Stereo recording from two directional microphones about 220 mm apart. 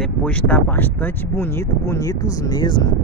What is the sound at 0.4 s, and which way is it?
Speech, 10° left (ahead or behind).